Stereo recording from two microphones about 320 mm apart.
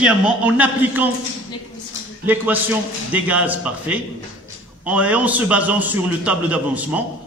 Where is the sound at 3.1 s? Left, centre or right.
Centre.